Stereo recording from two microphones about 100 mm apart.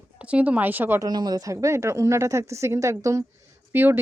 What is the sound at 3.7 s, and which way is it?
Speech, 20° right (ahead or behind).